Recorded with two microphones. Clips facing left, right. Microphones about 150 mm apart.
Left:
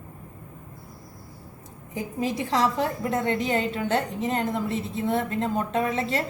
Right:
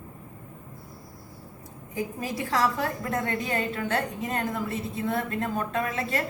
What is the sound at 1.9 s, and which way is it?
A woman's voice, 25° left (ahead or behind).